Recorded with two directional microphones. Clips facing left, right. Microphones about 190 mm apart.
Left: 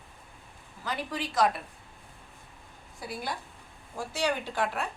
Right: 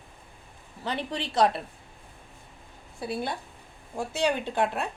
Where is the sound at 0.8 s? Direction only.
30° right (ahead or behind).